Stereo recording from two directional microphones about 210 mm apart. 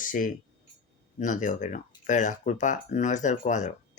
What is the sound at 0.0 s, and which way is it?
Speech, 40° left (ahead or behind).